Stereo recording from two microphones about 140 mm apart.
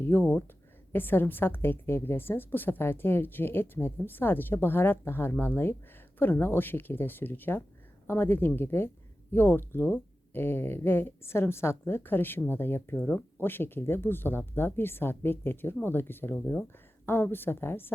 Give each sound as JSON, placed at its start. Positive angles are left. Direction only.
{"t": 0.0, "sound": "speech", "side_deg": 15}